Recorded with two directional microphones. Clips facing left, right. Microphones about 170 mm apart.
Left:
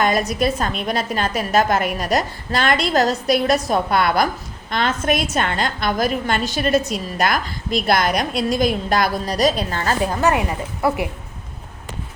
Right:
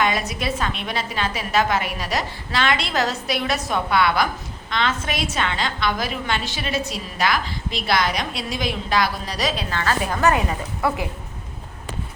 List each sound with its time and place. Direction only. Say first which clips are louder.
0.0 s a woman's voice: left 5 dB; 45° left (ahead or behind)
10.1 s a woman's voice: left 1 dB; 20° left (ahead or behind)